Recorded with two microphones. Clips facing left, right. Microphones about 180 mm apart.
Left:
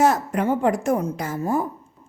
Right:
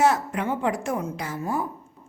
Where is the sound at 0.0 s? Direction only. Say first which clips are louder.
Left 3 dB; 45° left (ahead or behind).